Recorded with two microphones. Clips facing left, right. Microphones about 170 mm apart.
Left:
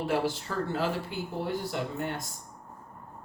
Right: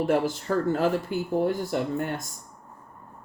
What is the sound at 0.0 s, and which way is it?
Speech, 50° right (ahead or behind).